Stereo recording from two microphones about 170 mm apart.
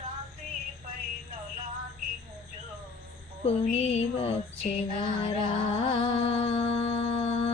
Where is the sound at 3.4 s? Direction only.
35° left (ahead or behind).